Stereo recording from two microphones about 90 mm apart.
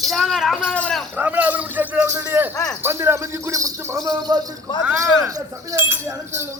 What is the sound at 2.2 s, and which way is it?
Speech, 25° right (ahead or behind).